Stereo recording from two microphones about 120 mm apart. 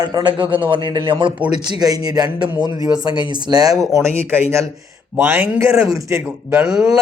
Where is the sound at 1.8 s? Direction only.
30° right (ahead or behind).